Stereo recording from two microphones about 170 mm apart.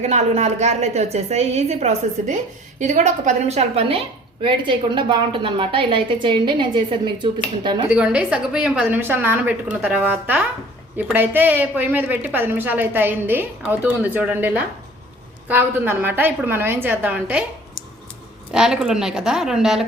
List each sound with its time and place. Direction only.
0.0 s a woman's voice: 40° right (ahead or behind)
7.9 s a woman's voice: 5° right (ahead or behind)
18.5 s a woman's voice: 5° right (ahead or behind)